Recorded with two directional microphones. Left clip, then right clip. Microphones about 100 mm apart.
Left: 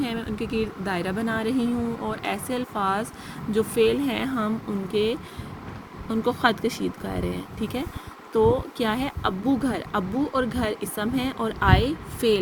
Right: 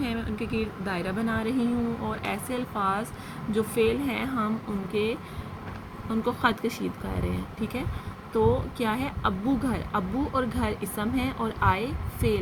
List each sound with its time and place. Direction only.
0.0 s speech: 75° left (ahead or behind); by 12.4 s 45° left (ahead or behind)